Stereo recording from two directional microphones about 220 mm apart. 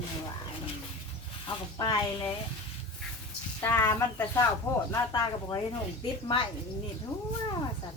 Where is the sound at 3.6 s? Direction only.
10° left (ahead or behind).